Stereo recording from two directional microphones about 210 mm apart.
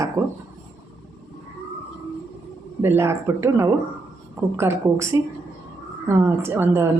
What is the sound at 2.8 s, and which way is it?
Speech, 10° right (ahead or behind).